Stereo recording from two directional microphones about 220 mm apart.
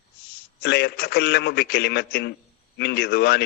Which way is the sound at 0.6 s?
45° left (ahead or behind).